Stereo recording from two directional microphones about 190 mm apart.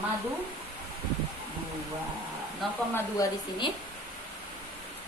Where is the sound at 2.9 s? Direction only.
15° left (ahead or behind).